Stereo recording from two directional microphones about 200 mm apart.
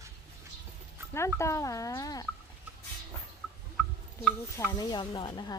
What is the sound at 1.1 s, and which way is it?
Speech, 15° left (ahead or behind).